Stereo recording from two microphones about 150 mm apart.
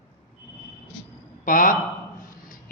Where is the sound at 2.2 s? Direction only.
65° left (ahead or behind).